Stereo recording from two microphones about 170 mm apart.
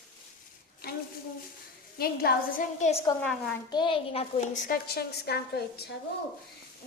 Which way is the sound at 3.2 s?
5° left (ahead or behind).